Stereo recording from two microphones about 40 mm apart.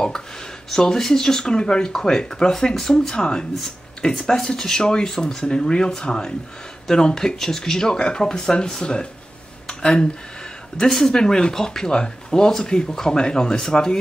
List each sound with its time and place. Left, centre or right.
0.7 s speech: centre
9.7 s a sound: centre
10.8 s speech: centre